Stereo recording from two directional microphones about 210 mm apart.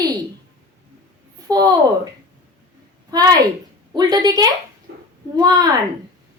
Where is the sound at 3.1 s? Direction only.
20° right (ahead or behind).